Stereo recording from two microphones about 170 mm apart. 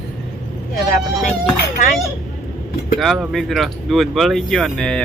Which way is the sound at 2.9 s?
Centre (ahead or behind).